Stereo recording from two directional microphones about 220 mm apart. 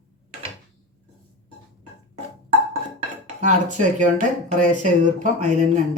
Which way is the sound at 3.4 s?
35° right (ahead or behind).